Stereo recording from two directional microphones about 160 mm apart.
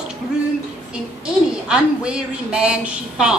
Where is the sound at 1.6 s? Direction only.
5° right (ahead or behind).